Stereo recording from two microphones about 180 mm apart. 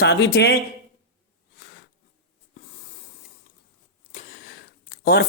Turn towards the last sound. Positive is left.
turn(degrees=60)  # may be behind; listen again after turning